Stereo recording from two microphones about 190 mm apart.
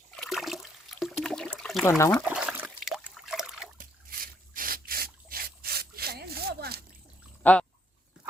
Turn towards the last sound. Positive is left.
turn(degrees=5)  # may be behind; listen again after turning